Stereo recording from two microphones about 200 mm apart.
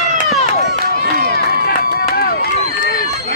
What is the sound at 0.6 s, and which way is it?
Run, 50° right (ahead or behind).